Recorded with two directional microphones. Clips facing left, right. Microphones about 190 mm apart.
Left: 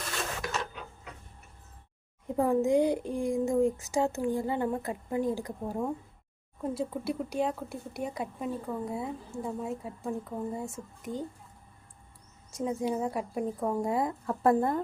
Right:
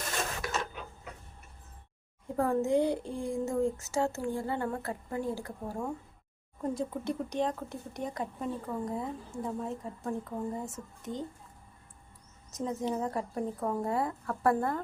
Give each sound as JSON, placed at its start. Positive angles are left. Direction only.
{"t": 2.3, "sound": "speech", "side_deg": 15}
{"t": 6.6, "sound": "speech", "side_deg": 5}
{"t": 12.5, "sound": "speech", "side_deg": 10}